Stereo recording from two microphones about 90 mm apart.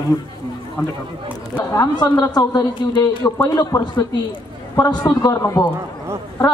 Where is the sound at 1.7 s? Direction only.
45° left (ahead or behind).